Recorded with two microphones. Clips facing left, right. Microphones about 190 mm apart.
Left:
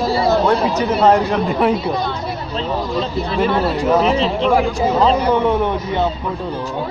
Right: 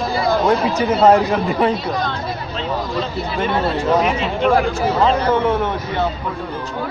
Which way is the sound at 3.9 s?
30° left (ahead or behind).